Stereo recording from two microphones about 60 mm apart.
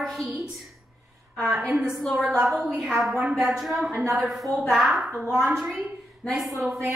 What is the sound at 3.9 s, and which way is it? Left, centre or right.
Speech, right.